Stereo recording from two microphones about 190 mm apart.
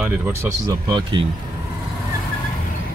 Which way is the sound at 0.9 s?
25° right (ahead or behind).